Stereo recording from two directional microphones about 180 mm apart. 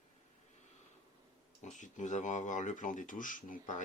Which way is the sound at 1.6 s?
45° left (ahead or behind).